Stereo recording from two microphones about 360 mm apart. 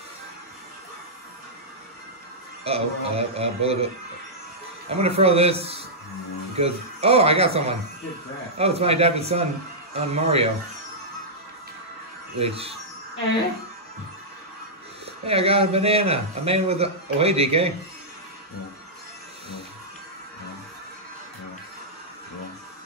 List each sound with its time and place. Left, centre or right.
2.6 s speech: centre
12.4 s speech: centre
15.2 s speech: centre